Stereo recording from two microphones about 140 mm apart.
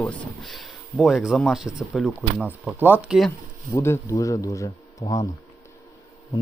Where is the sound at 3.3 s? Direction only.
20° left (ahead or behind).